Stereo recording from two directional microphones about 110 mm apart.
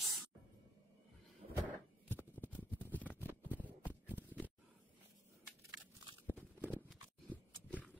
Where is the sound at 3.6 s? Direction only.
15° left (ahead or behind).